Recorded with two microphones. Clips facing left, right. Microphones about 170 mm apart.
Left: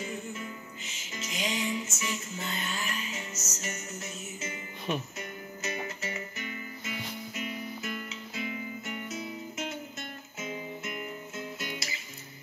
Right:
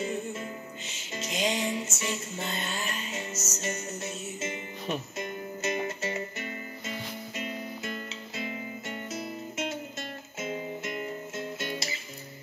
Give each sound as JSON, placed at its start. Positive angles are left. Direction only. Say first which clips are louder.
{"t": 0.0, "sound": "music", "louder": "right 5 dB", "side_deg": -35}
{"t": 11.3, "sound": "music", "louder": "right 3 dB", "side_deg": -30}